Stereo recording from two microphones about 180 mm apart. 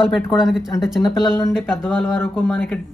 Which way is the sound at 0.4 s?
5° right (ahead or behind).